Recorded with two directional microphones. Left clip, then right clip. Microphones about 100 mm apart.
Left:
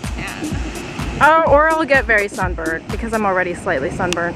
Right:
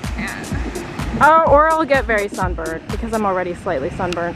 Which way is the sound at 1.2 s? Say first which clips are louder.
Even; 10° left (ahead or behind).